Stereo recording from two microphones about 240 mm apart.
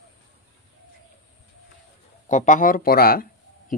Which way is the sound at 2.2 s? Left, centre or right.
Left.